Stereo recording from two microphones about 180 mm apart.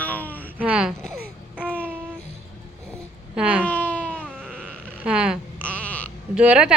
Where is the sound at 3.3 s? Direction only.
5° right (ahead or behind).